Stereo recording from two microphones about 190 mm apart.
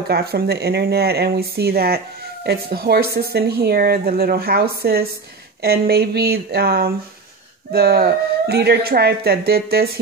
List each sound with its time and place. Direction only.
0.1 s speech: 55° right (ahead or behind)